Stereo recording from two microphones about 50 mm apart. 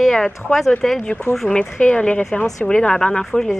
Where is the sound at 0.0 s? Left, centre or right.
Centre.